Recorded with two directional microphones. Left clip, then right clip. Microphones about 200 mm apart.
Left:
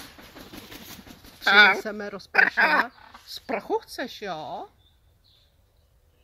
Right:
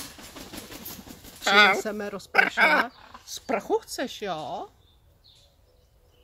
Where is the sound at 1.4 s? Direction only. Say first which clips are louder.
Left 2 dB; 15° right (ahead or behind).